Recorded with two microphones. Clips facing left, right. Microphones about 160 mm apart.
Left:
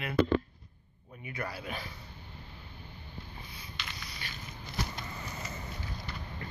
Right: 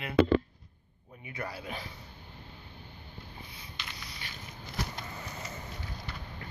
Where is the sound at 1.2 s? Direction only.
20° right (ahead or behind).